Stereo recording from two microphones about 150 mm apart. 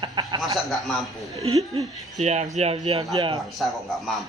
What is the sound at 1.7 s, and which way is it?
A man's voice, 45° right (ahead or behind).